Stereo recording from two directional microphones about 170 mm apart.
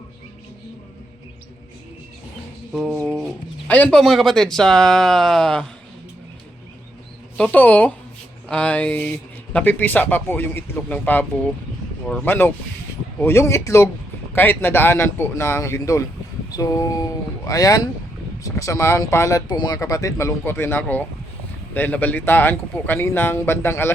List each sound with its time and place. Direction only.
2.7 s speech: 5° right (ahead or behind)
3.0 s bird: 5° right (ahead or behind)
3.7 s speech: 5° left (ahead or behind)
7.3 s speech: 10° left (ahead or behind)